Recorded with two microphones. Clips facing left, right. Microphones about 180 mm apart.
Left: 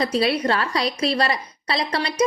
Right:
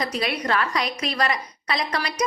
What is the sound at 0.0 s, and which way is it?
A woman's voice, 30° left (ahead or behind).